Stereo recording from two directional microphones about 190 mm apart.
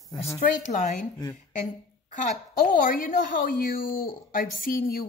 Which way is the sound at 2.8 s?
45° left (ahead or behind).